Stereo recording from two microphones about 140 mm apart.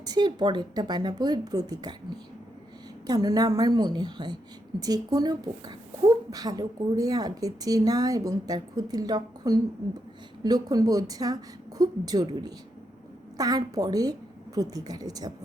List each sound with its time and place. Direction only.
0.0 s a woman's voice: 30° right (ahead or behind)
3.1 s a woman's voice: 25° right (ahead or behind)